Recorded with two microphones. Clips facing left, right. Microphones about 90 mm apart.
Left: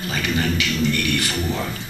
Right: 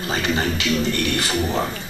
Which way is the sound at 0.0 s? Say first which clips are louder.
Right 1 dB; 35° right (ahead or behind).